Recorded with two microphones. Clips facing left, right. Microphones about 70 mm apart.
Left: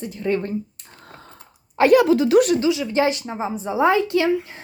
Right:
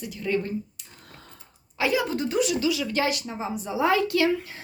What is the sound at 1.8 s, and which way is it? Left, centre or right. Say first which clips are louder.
Speech: left 11 dB; left.